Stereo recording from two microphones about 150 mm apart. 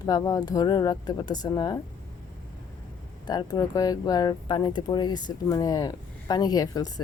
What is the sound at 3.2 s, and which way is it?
Speech, 30° left (ahead or behind).